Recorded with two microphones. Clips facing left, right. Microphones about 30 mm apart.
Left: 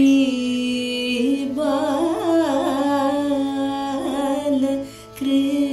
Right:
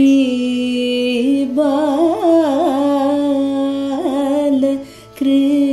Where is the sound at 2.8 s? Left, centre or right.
Right.